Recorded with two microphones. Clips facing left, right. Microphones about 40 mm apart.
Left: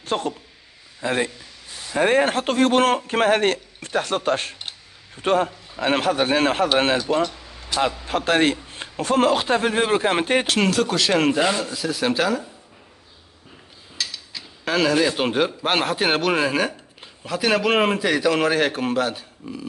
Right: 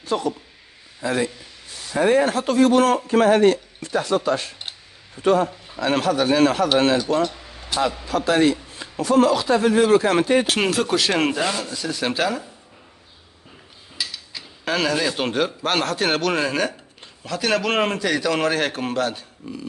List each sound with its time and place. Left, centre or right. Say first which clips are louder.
0.0 s a man's voice: right 1 dB; left
7.2 s a sound: right 2 dB; centre
8.0 s speech: right 2 dB; left
10.4 s speech: left 1 dB; centre
11.3 s speech: left 3 dB; centre
11.6 s speech: left 2 dB; centre
13.9 s speech: even; centre